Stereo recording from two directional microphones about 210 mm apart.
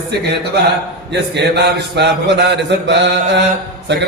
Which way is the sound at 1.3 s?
55° right (ahead or behind).